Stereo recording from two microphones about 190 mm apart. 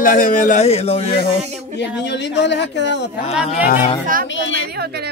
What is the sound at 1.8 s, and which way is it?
Speech, 65° left (ahead or behind).